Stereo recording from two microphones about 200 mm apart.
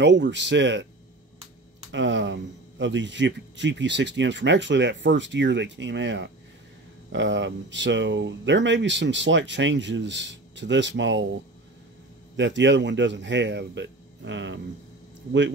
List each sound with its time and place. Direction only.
0.0 s a man's voice: 60° right (ahead or behind)
1.9 s a man's voice: 65° right (ahead or behind)
12.4 s a man's voice: 65° right (ahead or behind)